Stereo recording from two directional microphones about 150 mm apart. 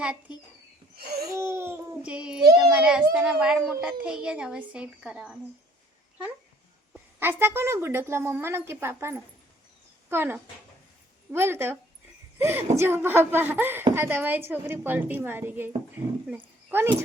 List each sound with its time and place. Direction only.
0.9 s a sound: 90° right
1.4 s a sound: 15° right (ahead or behind)
2.0 s child singing: 5° right (ahead or behind)
2.6 s baby cry: 5° right (ahead or behind)
3.2 s speech: 5° right (ahead or behind)
6.9 s a woman's voice: 15° right (ahead or behind)